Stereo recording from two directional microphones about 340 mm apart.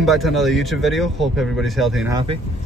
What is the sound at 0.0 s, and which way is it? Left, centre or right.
A man's voice, centre.